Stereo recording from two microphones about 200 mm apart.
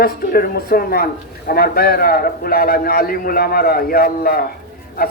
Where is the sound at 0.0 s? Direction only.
50° left (ahead or behind).